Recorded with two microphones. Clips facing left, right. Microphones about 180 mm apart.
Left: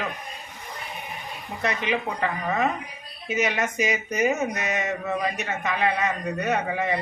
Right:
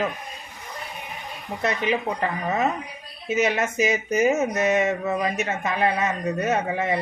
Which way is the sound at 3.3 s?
25° right (ahead or behind).